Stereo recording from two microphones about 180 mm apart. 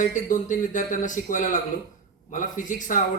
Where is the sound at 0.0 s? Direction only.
45° left (ahead or behind).